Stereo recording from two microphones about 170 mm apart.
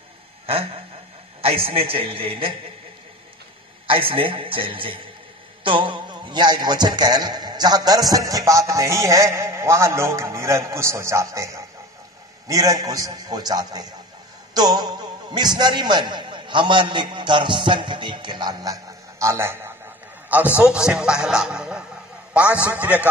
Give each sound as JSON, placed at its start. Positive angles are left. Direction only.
{"t": 1.4, "sound": "a man's voice", "side_deg": -35}
{"t": 3.8, "sound": "a man's voice", "side_deg": -30}
{"t": 14.5, "sound": "music", "side_deg": -25}
{"t": 15.3, "sound": "a man's voice", "side_deg": -25}